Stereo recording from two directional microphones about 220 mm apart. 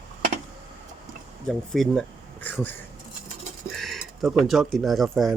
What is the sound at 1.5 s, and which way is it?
Speech, centre (ahead or behind).